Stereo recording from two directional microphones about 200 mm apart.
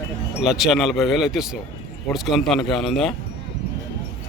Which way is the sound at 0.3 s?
Centre (ahead or behind).